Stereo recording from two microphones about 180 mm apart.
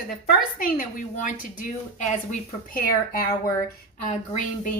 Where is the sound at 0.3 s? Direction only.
50° left (ahead or behind).